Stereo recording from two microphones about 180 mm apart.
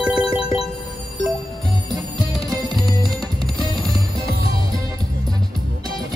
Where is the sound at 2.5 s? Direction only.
25° right (ahead or behind).